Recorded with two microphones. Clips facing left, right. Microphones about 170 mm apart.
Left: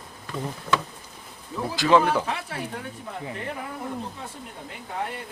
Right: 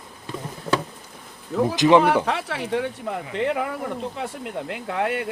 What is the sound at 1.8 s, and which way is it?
Speech, 20° right (ahead or behind).